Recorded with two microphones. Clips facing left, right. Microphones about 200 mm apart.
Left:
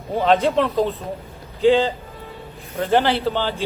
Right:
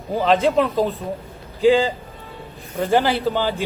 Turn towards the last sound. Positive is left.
turn(degrees=-10)  # may be behind; listen again after turning